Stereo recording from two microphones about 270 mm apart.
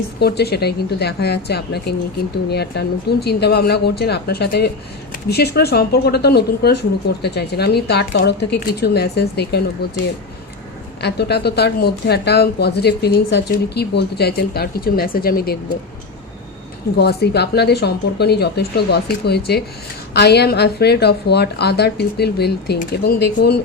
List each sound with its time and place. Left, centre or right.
0.2 s speech: left
11.0 s speech: left
17.0 s speech: left